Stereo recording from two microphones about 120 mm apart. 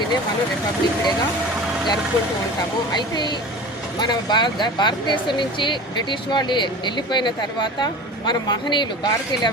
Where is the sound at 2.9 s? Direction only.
35° left (ahead or behind).